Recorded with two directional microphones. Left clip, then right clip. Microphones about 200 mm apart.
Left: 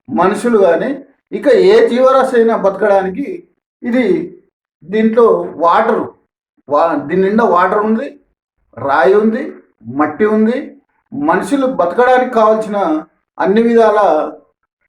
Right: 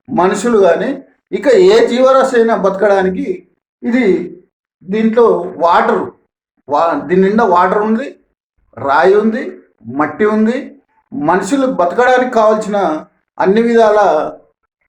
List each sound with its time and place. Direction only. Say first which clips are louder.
0.0 s speech: even; 15° right (ahead or behind)
4.9 s speech: even; 15° right (ahead or behind)